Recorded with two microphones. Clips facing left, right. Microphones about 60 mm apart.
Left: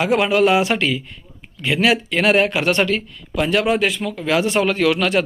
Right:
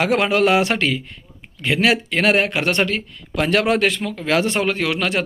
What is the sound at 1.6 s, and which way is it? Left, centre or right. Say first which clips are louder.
Speech: even; right.